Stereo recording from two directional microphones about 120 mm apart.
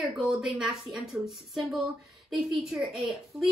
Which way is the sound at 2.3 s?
Centre (ahead or behind).